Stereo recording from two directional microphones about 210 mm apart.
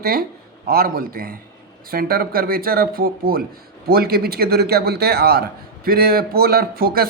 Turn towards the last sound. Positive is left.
turn(degrees=-45)  # may be behind; listen again after turning